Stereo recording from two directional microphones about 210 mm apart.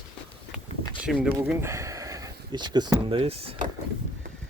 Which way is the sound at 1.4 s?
15° right (ahead or behind).